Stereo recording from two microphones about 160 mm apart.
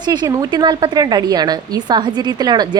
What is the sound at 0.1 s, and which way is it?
A woman's voice, 25° right (ahead or behind).